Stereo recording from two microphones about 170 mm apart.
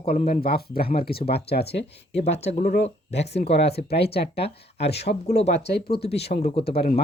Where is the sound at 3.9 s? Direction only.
70° left (ahead or behind).